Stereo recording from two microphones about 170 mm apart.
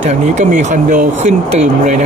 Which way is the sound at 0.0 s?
45° right (ahead or behind).